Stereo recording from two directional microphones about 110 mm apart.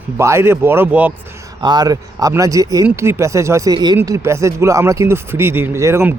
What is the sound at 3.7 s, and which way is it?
Speech, 40° right (ahead or behind).